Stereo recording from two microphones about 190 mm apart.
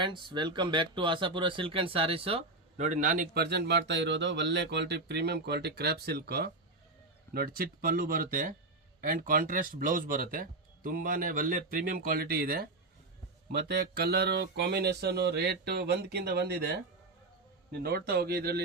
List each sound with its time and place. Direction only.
0.0 s speech: 25° right (ahead or behind); by 18.6 s 55° right (ahead or behind)